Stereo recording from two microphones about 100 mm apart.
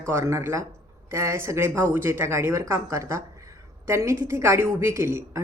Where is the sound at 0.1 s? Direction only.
25° right (ahead or behind).